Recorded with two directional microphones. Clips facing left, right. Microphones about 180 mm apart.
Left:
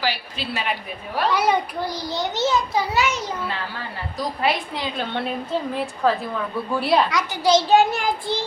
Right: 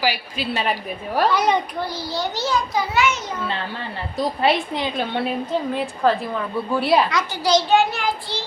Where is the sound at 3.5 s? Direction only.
25° right (ahead or behind).